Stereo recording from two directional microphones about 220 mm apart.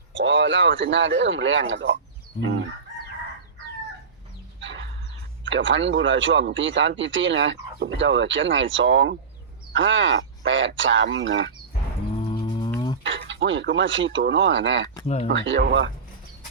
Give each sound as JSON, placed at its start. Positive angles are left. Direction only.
{"t": 0.1, "sound": "speech", "side_deg": -55}
{"t": 4.6, "sound": "a sound", "side_deg": -55}
{"t": 5.5, "sound": "speech", "side_deg": -55}
{"t": 12.3, "sound": "a sound", "side_deg": 20}
{"t": 12.7, "sound": "fowl", "side_deg": 20}
{"t": 13.0, "sound": "speech", "side_deg": -55}
{"t": 15.0, "sound": "speech", "side_deg": 30}
{"t": 15.3, "sound": "speech", "side_deg": -55}